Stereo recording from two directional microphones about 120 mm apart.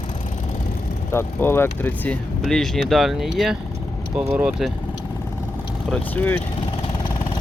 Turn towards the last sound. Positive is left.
turn(degrees=15)  # may be behind; listen again after turning